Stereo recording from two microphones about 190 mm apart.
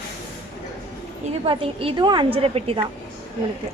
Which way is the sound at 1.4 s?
30° right (ahead or behind).